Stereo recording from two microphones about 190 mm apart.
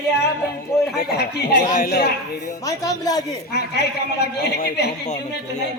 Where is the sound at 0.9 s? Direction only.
60° left (ahead or behind).